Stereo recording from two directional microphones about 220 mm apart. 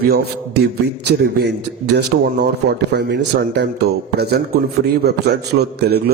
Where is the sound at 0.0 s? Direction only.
45° right (ahead or behind).